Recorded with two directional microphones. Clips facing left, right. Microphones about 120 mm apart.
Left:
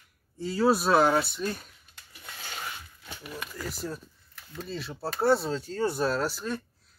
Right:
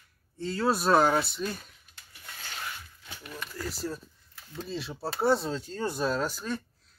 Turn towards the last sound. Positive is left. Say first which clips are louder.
# left 1 dB
turn(degrees=5)  # may be behind; listen again after turning